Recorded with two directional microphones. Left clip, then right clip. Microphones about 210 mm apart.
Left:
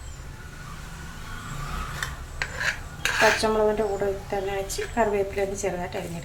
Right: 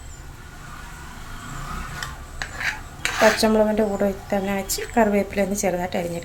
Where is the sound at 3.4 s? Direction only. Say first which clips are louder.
Right 3 dB; 45° right (ahead or behind).